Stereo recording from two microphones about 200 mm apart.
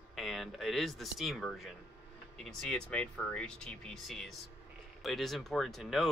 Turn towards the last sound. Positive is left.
turn(degrees=0)  # may be behind; listen again after turning